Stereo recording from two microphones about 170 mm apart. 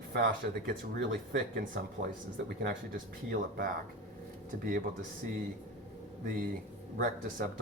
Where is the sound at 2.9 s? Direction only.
60° right (ahead or behind).